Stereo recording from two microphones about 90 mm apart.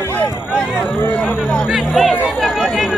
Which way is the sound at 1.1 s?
20° left (ahead or behind).